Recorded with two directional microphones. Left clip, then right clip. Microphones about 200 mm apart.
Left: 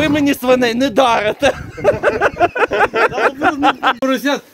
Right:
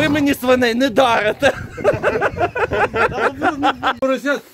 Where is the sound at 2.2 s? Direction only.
65° left (ahead or behind).